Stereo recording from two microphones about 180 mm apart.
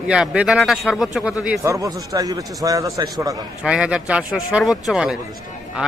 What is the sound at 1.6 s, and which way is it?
Speech, 20° right (ahead or behind).